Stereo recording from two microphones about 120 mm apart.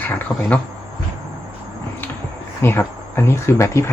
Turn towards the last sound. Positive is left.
turn(degrees=20)  # may be behind; listen again after turning